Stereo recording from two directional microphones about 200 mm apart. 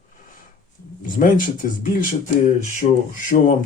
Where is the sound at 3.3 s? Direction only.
40° left (ahead or behind).